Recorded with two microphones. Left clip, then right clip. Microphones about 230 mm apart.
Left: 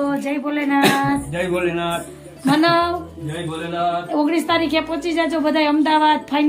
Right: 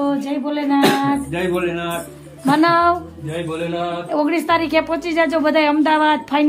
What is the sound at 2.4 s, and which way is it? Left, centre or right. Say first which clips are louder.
Music: right 2 dB; centre.